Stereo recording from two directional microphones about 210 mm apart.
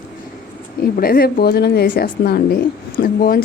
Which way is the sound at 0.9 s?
45° left (ahead or behind).